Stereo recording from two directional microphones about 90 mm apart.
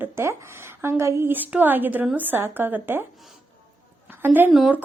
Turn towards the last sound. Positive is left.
turn(degrees=-25)  # may be behind; listen again after turning